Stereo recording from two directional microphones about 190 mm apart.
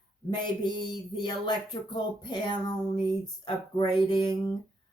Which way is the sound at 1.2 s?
20° left (ahead or behind).